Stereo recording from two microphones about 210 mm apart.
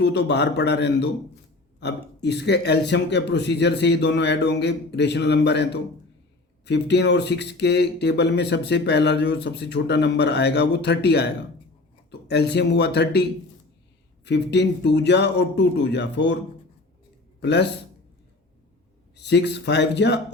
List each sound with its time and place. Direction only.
0.0 s speech: 55° left (ahead or behind)
12.3 s speech: 50° left (ahead or behind)
14.3 s speech: 55° left (ahead or behind)
17.4 s a man's voice: 55° left (ahead or behind)
19.1 s speech: 55° left (ahead or behind)